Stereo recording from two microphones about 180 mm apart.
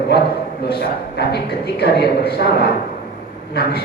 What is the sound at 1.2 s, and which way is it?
A man's voice, 65° left (ahead or behind).